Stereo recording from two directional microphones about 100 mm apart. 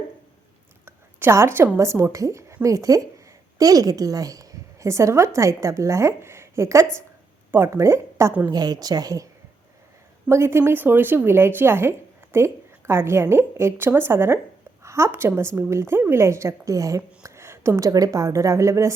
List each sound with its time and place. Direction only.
0.9 s a woman's voice: 25° right (ahead or behind)
8.5 s a woman's voice: 40° right (ahead or behind)
10.2 s speech: 25° right (ahead or behind)